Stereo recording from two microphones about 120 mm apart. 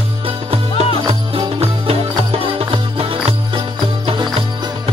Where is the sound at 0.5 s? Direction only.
55° right (ahead or behind).